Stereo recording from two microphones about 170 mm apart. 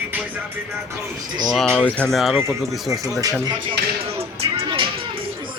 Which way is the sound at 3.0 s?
20° right (ahead or behind).